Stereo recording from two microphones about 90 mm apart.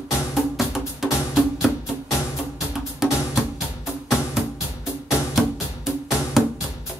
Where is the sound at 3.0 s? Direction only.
5° right (ahead or behind).